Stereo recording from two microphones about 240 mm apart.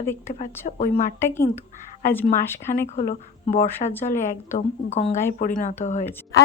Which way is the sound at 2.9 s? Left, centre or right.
Left.